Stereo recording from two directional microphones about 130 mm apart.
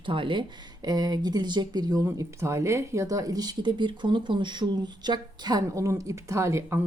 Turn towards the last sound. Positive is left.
turn(degrees=-20)  # may be behind; listen again after turning